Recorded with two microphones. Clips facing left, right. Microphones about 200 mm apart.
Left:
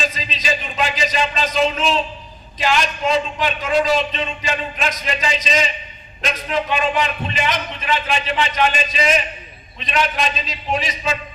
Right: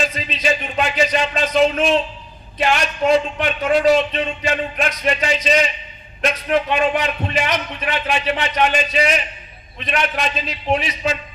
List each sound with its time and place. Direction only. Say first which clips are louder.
0.1 s a man's voice: right 3 dB; 60° right (ahead or behind)